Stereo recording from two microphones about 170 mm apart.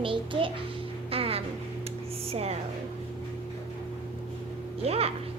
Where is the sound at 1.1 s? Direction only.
35° right (ahead or behind).